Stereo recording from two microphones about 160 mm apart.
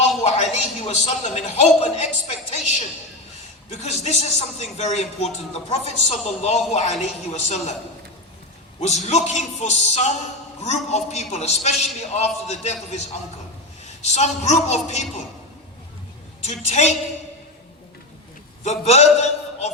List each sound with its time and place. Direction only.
0.2 s a man's voice: 40° left (ahead or behind)
8.8 s speech: 45° left (ahead or behind)
16.4 s speech: 45° left (ahead or behind)
18.6 s a man's voice: 45° left (ahead or behind)